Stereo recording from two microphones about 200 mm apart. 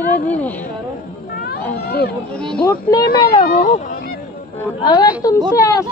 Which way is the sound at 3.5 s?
45° left (ahead or behind).